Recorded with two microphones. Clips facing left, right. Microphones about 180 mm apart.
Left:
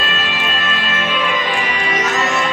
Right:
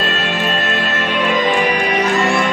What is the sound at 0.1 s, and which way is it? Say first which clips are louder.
Music: right 4 dB; 50° right (ahead or behind).